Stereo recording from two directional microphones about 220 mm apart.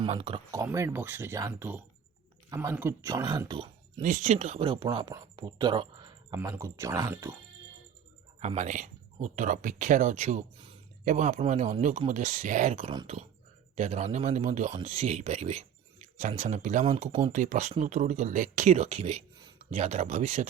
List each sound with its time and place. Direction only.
0.0 s speech: 25° right (ahead or behind)
8.4 s speech: 30° right (ahead or behind)